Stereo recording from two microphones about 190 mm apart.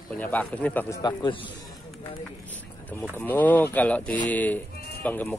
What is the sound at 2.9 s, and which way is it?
Speech, 10° left (ahead or behind).